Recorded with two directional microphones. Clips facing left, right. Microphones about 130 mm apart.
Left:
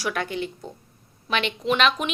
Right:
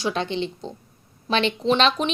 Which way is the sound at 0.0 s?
25° right (ahead or behind).